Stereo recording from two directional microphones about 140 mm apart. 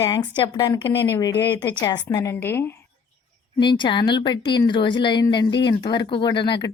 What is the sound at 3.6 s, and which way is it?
A woman's voice, 35° left (ahead or behind).